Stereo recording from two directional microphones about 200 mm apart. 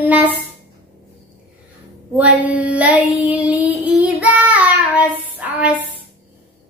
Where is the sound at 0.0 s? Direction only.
10° right (ahead or behind).